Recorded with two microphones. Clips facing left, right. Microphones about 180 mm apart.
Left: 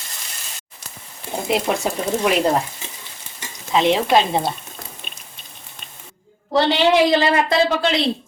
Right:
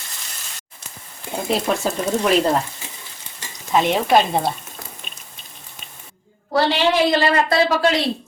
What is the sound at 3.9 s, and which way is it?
Speech, centre (ahead or behind).